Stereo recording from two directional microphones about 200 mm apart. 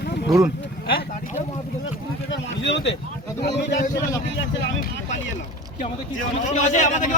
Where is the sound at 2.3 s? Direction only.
65° left (ahead or behind).